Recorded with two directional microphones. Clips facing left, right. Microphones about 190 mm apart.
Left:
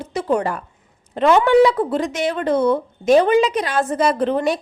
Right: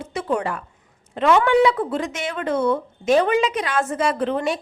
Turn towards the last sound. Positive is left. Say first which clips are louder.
# left 3 dB
turn(degrees=35)  # may be behind; listen again after turning